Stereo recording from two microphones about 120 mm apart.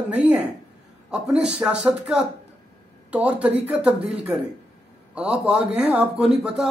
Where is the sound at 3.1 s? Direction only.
10° right (ahead or behind).